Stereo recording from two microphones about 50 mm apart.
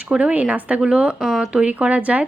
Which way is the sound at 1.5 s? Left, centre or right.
Right.